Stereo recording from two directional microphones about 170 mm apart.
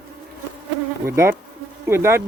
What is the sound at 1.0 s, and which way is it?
Speech, 15° right (ahead or behind).